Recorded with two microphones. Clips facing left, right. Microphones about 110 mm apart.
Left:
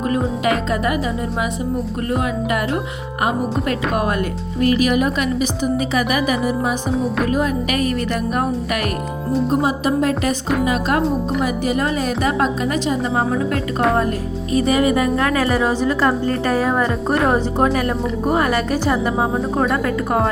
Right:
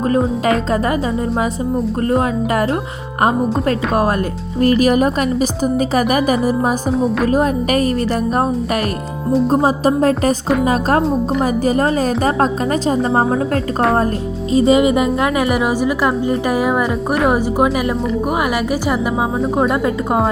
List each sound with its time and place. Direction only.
2.0 s a woman's voice: 35° right (ahead or behind)
6.9 s a woman's voice: centre (ahead or behind)
7.3 s a woman's voice: 35° right (ahead or behind)
11.0 s a woman's voice: centre (ahead or behind)
11.4 s a woman's voice: 35° right (ahead or behind)
14.5 s a woman's voice: 25° right (ahead or behind); by 18.9 s 10° right (ahead or behind)
19.7 s speech: 20° right (ahead or behind)